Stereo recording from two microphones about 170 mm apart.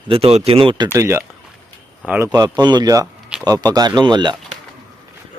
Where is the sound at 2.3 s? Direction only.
20° right (ahead or behind).